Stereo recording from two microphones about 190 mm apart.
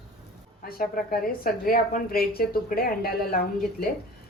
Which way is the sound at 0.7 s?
50° left (ahead or behind).